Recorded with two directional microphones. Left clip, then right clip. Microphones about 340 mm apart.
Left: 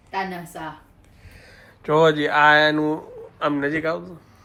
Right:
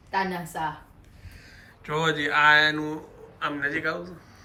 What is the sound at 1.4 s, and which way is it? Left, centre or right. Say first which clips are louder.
Speech: left 2 dB; centre.